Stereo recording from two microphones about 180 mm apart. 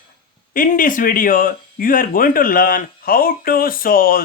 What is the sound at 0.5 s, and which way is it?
Speech, 50° left (ahead or behind).